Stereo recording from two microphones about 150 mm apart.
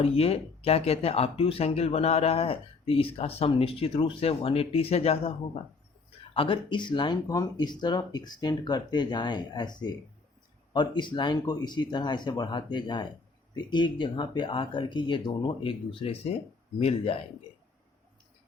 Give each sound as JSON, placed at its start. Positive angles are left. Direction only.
{"t": 0.0, "sound": "speech", "side_deg": 40}
{"t": 6.3, "sound": "speech", "side_deg": 35}